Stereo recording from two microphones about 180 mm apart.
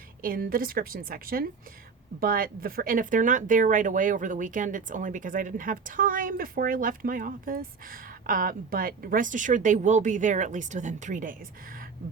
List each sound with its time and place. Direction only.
0.2 s speech: 50° right (ahead or behind)